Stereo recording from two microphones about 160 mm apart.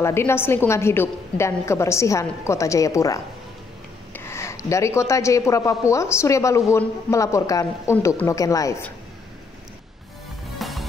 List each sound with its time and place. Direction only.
0.0 s a woman's voice: 15° left (ahead or behind)
10.6 s music: centre (ahead or behind)